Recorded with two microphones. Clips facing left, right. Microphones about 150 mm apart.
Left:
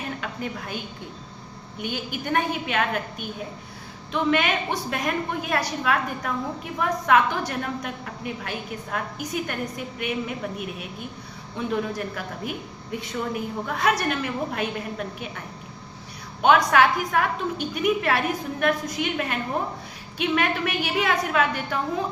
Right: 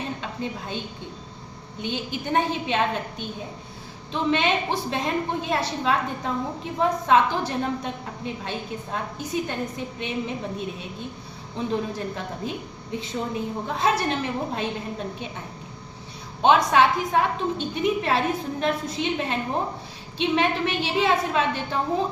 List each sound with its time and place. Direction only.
0.2 s a woman's voice: 25° right (ahead or behind)
1.8 s a woman's voice: 25° right (ahead or behind)
16.4 s a woman's voice: 25° right (ahead or behind)